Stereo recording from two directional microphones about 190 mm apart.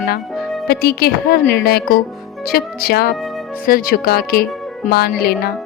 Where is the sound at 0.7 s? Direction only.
55° left (ahead or behind).